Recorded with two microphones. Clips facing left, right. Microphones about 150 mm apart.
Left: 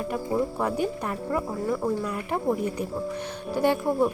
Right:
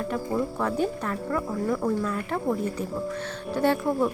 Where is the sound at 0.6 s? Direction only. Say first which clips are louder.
Even; 15° left (ahead or behind).